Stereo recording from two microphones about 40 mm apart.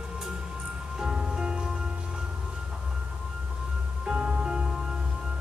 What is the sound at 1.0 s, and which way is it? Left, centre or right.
Music, centre.